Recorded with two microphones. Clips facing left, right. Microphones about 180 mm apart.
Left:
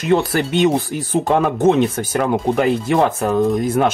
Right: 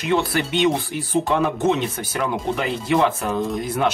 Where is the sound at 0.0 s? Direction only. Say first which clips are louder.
Left 4 dB; 45° left (ahead or behind).